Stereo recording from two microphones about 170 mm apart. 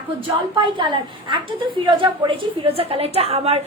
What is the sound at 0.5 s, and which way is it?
A woman's voice, 30° right (ahead or behind).